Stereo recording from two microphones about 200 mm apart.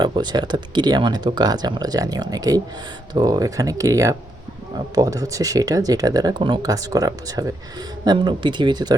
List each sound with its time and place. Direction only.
0.0 s speech: 20° right (ahead or behind)